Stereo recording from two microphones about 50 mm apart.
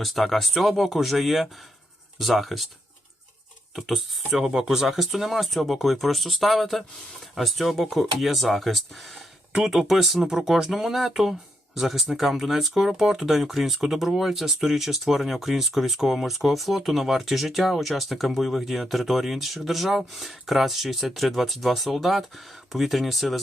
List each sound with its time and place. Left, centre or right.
0.0 s speech: centre
3.8 s speech: centre
9.5 s speech: centre